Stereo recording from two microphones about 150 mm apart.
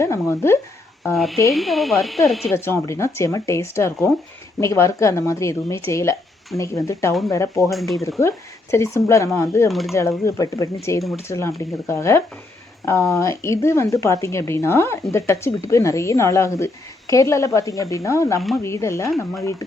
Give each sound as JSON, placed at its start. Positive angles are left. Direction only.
{"t": 0.0, "sound": "speech", "side_deg": 20}
{"t": 1.1, "sound": "speech", "side_deg": 0}
{"t": 2.5, "sound": "a woman's voice", "side_deg": 15}
{"t": 7.7, "sound": "speech", "side_deg": 0}
{"t": 8.7, "sound": "a woman's voice", "side_deg": 20}
{"t": 9.6, "sound": "speech", "side_deg": 0}
{"t": 10.2, "sound": "a woman's voice", "side_deg": 20}
{"t": 18.3, "sound": "speech", "side_deg": 0}
{"t": 18.6, "sound": "a woman's voice", "side_deg": 20}